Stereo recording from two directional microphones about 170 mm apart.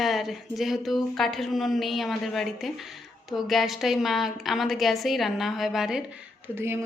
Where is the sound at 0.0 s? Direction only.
Centre (ahead or behind).